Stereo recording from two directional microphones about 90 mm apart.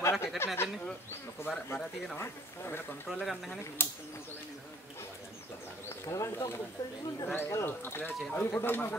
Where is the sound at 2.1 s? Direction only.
30° left (ahead or behind).